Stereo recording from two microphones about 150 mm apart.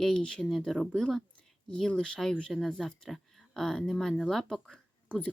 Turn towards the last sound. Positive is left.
turn(degrees=10)  # may be behind; listen again after turning